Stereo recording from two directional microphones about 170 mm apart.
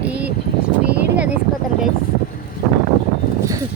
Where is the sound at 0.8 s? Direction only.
10° right (ahead or behind).